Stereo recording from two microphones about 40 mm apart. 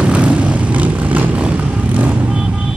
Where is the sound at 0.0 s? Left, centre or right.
Right.